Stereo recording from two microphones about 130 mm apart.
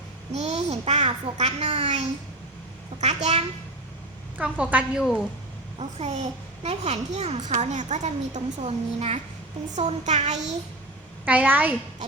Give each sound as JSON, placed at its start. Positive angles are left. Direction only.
{"t": 0.3, "sound": "a child's voice", "side_deg": -55}
{"t": 4.4, "sound": "a woman's voice", "side_deg": -10}
{"t": 5.8, "sound": "a child's voice", "side_deg": -55}
{"t": 11.3, "sound": "a woman's voice", "side_deg": -15}